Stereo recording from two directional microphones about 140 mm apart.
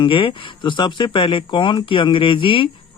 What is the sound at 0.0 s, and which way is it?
Speech, 40° left (ahead or behind).